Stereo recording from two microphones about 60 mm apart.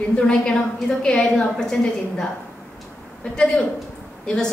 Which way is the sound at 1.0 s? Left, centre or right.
Centre.